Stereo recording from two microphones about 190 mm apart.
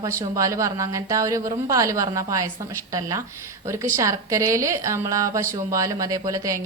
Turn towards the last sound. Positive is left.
turn(degrees=-15)  # may be behind; listen again after turning